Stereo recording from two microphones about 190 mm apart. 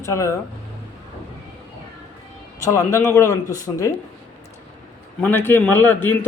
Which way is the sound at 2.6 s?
15° left (ahead or behind).